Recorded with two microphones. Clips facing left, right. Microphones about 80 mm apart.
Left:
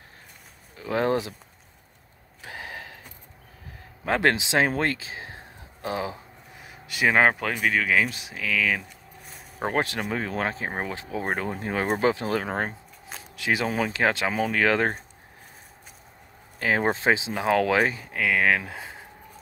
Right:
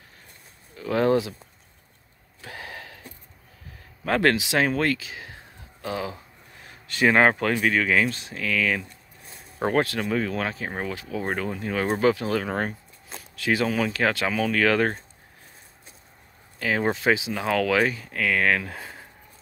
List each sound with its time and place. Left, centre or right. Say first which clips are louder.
0.7 s speech: right 3 dB; left
2.4 s a sound: left 1 dB; centre
4.0 s speech: right 1 dB; centre
4.7 s a sound: right 2 dB; left
6.6 s speech: right 2 dB; centre
9.8 s speech: right 3 dB; left
16.5 s speech: left 1 dB; left
18.0 s speech: even; centre